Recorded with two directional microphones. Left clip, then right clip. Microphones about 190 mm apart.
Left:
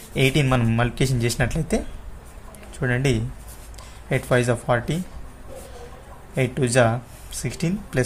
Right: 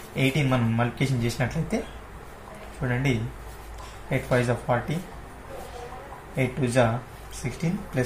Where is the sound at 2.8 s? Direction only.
55° left (ahead or behind).